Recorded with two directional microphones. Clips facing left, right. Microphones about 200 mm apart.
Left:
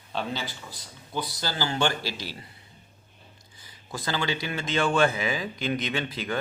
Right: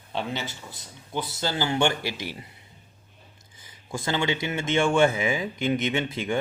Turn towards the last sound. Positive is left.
turn(degrees=-25)  # may be behind; listen again after turning